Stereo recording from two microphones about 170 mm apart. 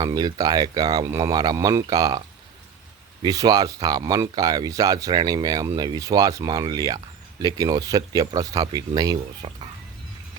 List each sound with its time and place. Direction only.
0.0 s speech: 25° right (ahead or behind)